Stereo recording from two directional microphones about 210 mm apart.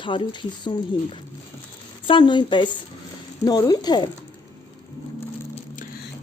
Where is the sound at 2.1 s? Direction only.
20° left (ahead or behind).